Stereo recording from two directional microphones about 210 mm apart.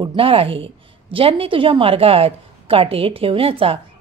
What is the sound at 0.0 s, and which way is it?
A woman's voice, 25° right (ahead or behind).